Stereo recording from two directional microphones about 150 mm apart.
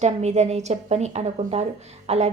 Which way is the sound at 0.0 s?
50° right (ahead or behind).